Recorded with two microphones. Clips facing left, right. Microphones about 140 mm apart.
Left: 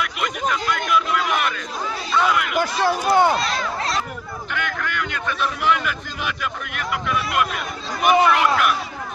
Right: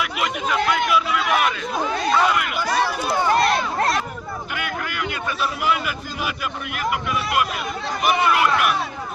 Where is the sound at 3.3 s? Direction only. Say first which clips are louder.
Right 5 dB; 55° right (ahead or behind).